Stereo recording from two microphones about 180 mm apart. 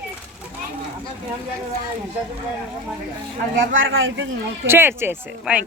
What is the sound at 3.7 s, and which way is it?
Speech, 90° right.